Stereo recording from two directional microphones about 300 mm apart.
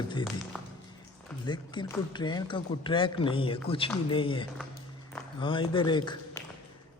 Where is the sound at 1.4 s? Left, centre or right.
Centre.